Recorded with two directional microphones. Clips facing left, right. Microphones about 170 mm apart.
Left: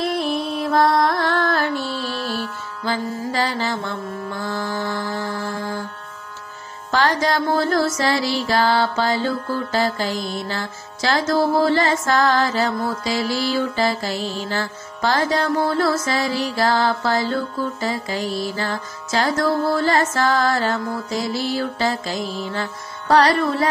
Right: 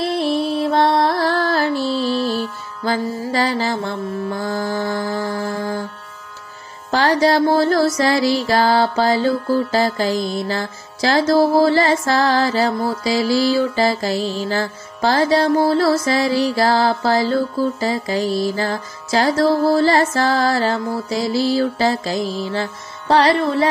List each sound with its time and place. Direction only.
0.0 s music: 30° right (ahead or behind)
2.8 s mantra: 40° right (ahead or behind)
5.3 s music: 40° right (ahead or behind)
6.9 s mantra: 35° right (ahead or behind)